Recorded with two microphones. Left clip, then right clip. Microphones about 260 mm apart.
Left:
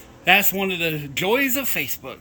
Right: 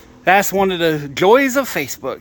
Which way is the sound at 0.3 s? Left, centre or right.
Centre.